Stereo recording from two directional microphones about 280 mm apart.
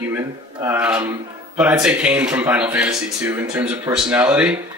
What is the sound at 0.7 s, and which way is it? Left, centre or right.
A man's voice, centre.